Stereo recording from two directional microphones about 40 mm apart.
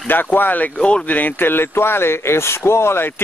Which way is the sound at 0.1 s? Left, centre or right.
Left.